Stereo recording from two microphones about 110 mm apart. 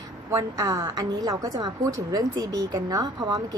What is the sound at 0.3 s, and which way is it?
A woman's voice, 35° right (ahead or behind).